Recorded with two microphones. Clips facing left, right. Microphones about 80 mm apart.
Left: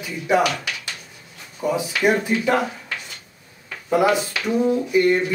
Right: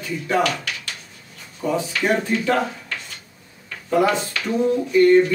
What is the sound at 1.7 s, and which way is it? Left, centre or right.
Speech, centre.